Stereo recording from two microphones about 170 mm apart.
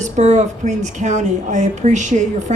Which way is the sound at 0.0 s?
45° right (ahead or behind).